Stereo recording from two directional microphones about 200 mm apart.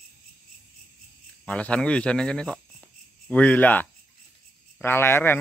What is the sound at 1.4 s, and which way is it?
Speech, 5° left (ahead or behind).